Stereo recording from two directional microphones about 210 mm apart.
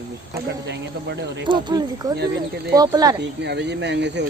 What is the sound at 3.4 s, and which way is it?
Speech, 55° right (ahead or behind).